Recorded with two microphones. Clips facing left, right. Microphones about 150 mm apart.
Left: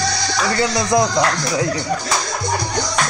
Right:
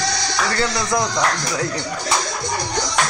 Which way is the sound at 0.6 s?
15° left (ahead or behind).